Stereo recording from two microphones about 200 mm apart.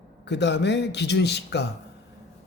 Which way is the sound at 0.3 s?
60° left (ahead or behind).